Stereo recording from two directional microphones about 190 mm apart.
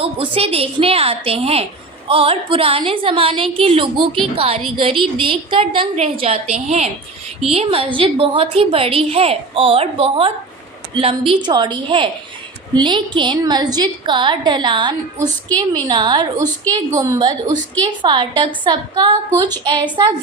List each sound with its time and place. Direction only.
0.3 s a woman's voice: 30° right (ahead or behind)